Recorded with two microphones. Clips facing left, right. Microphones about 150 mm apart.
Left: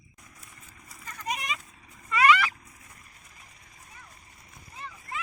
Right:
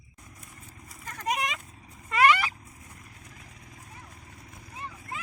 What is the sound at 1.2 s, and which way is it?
Vehicle, 75° right (ahead or behind).